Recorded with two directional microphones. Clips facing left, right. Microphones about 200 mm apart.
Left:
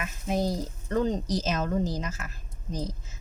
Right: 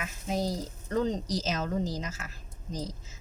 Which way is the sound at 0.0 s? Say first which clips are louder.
Left 3 dB; 55° left (ahead or behind).